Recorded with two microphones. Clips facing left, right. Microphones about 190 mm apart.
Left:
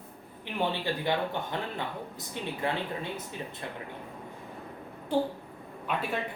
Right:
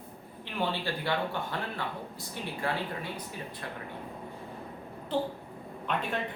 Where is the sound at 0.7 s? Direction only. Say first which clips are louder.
Left 2 dB; 20° left (ahead or behind).